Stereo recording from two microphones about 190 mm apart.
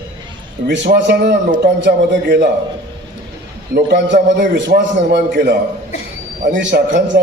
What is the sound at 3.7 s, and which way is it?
A man's voice, 65° right (ahead or behind).